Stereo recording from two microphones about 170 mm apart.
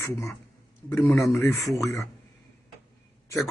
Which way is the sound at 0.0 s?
15° left (ahead or behind).